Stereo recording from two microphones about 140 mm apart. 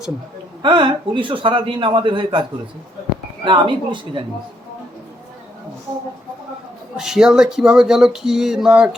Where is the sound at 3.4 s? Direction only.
35° right (ahead or behind).